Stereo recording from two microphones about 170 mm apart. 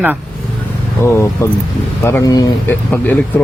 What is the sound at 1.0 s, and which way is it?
Speech, 15° left (ahead or behind).